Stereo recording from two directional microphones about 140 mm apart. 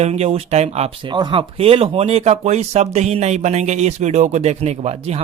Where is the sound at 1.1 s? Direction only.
35° right (ahead or behind).